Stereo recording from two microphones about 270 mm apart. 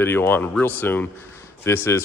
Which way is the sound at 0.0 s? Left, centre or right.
Centre.